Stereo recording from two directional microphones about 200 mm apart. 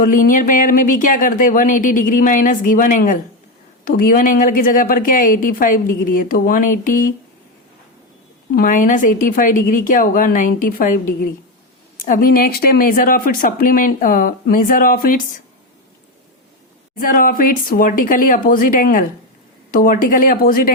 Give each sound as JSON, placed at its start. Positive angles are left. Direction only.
{"t": 0.0, "sound": "speech", "side_deg": 45}
{"t": 8.5, "sound": "speech", "side_deg": 40}
{"t": 17.0, "sound": "speech", "side_deg": 45}